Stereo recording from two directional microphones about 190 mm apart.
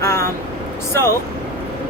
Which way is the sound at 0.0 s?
15° left (ahead or behind).